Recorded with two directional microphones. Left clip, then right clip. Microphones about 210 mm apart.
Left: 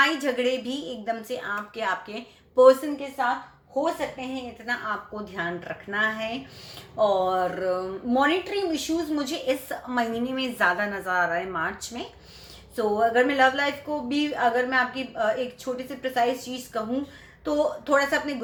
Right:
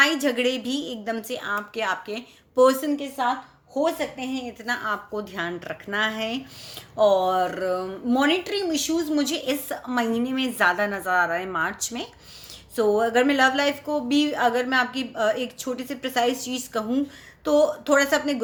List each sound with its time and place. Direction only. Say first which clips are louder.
0.0 s a woman's voice: right 2 dB; 40° right (ahead or behind)